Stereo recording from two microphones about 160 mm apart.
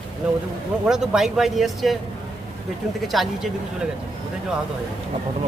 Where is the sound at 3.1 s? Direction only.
Centre (ahead or behind).